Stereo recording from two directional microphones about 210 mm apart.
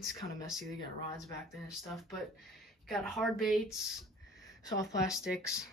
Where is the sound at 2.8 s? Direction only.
Centre (ahead or behind).